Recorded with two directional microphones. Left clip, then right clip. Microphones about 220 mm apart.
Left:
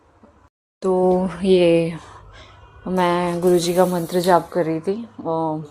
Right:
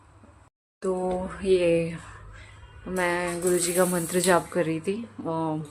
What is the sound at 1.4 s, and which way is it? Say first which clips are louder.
Speech: left 5 dB; 30° left (ahead or behind).